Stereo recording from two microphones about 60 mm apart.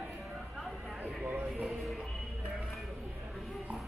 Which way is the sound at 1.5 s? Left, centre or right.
Centre.